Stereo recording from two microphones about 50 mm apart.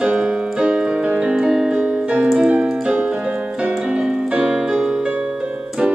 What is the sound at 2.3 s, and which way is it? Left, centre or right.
Keyboard, right.